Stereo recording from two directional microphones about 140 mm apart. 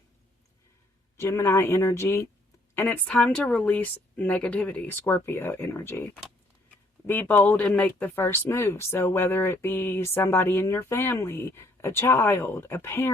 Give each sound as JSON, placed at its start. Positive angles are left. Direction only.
{"t": 1.1, "sound": "speech", "side_deg": 20}
{"t": 7.1, "sound": "speech", "side_deg": 15}